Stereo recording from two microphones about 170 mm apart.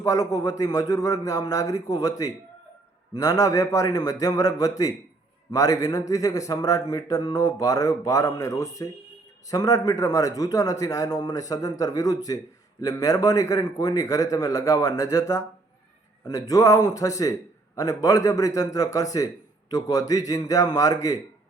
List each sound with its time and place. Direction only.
0.0 s a man's voice: 20° left (ahead or behind)